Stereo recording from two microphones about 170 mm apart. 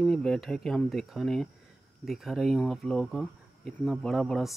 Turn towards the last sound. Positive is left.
turn(degrees=0)  # may be behind; listen again after turning